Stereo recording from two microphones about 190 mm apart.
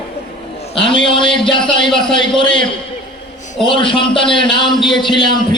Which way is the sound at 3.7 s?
25° left (ahead or behind).